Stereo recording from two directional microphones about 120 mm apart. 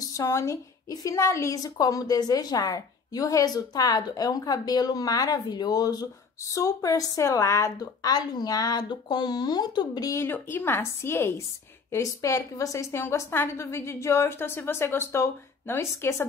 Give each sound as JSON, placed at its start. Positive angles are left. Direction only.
{"t": 0.0, "sound": "a woman's voice", "side_deg": 25}